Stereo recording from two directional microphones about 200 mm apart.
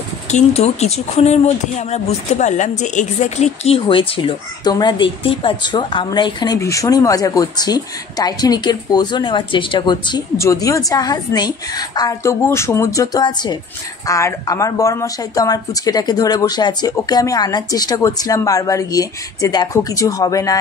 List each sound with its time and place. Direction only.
0.3 s speech: 35° left (ahead or behind); by 20.5 s 15° left (ahead or behind)